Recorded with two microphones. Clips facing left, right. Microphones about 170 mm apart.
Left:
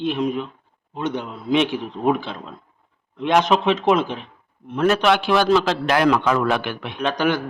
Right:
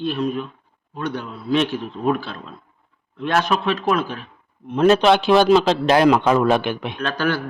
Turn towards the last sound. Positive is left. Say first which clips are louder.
# left 2 dB
turn(degrees=15)  # may be behind; listen again after turning